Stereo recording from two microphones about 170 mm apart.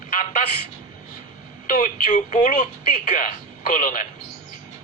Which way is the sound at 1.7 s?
50° left (ahead or behind).